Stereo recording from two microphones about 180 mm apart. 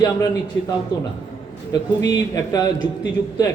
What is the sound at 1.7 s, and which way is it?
Speech, 20° left (ahead or behind).